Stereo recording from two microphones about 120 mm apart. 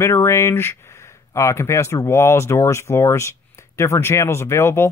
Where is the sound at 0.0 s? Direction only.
20° left (ahead or behind).